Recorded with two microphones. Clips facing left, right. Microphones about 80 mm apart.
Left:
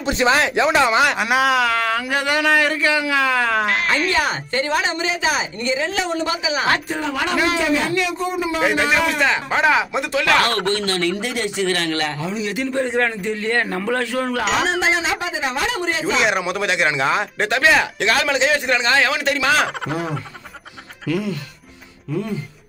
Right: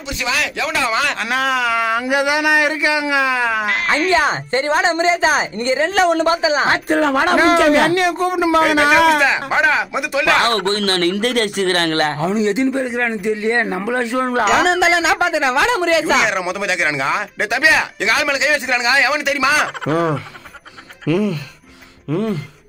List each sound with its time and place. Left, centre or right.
0.0 s speech: left; by 4.1 s centre
4.1 s a woman's voice: right
6.9 s a sound: right
7.2 s speech: right
7.5 s a man's voice: right
8.0 s speech: right
8.7 s a man's voice: right
9.2 s speech: centre
10.9 s speech: right
12.7 s a man's voice: centre
14.8 s speech: right
16.2 s speech: centre
19.9 s speech: right
22.1 s a sound: right